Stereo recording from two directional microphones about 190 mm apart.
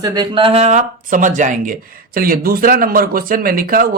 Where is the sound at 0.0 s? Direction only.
20° right (ahead or behind).